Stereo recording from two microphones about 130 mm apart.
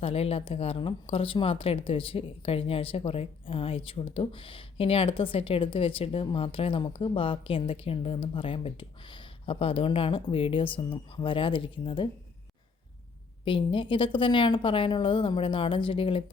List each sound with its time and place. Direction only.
0.0 s speech: 50° left (ahead or behind)
13.4 s a woman's voice: 40° left (ahead or behind)